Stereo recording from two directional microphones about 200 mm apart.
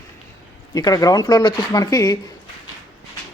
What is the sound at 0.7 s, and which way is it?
Speech, 20° left (ahead or behind).